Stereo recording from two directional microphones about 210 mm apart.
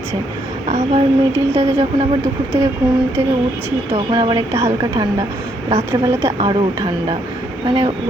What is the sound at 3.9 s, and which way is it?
Speech, 25° right (ahead or behind).